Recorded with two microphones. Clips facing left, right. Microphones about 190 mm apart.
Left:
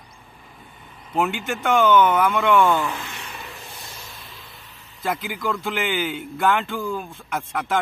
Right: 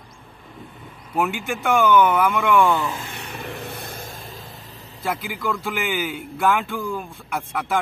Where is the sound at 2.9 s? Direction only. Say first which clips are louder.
Right 2 dB; 60° right (ahead or behind).